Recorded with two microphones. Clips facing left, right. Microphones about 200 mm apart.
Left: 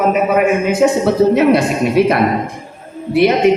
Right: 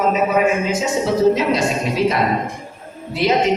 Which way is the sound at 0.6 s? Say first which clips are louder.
Left 7 dB; 60° left (ahead or behind).